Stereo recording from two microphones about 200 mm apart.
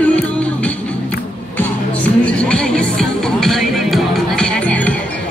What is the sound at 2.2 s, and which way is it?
Music, 5° left (ahead or behind).